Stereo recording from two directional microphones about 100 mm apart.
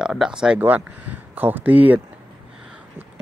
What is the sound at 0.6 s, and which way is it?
Speech, 20° right (ahead or behind).